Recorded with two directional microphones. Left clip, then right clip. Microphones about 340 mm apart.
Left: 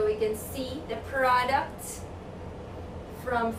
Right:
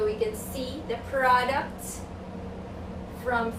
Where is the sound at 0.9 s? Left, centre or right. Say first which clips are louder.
Right 2 dB; centre.